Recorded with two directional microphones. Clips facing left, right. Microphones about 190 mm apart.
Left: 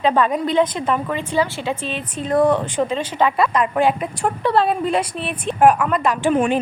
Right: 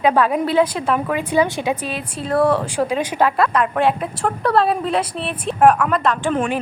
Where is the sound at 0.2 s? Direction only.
5° right (ahead or behind).